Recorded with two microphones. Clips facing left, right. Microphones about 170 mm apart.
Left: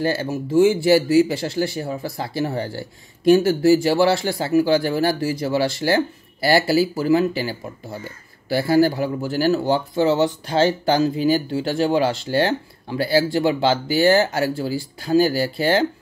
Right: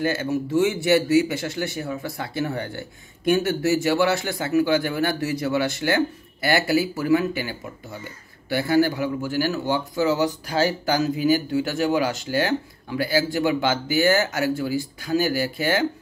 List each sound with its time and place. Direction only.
0.0 s speech: 30° left (ahead or behind)